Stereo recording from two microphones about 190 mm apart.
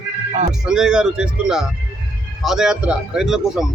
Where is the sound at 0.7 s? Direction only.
5° right (ahead or behind).